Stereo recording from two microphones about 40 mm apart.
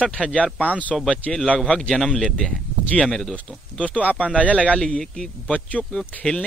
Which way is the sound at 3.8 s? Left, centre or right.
Left.